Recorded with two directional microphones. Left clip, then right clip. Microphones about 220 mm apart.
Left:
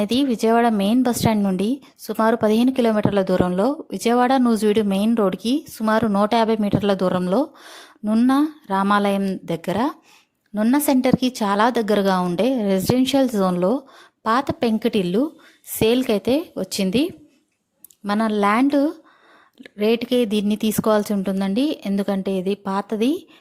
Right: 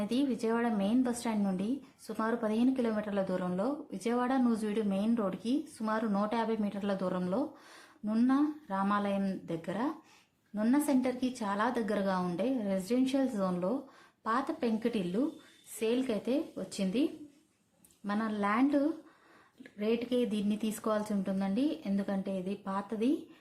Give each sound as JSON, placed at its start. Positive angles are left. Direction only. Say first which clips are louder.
{"t": 0.0, "sound": "a woman's voice", "louder": "left 13 dB", "side_deg": 40}